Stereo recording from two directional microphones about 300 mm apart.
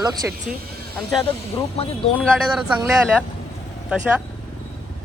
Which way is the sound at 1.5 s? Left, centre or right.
Centre.